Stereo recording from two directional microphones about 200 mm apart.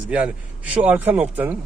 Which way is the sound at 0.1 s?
5° right (ahead or behind).